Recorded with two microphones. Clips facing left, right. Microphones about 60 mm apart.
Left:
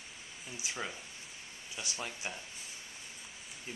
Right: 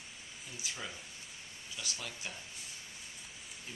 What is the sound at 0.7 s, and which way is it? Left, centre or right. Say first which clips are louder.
Speech: left 4 dB; left.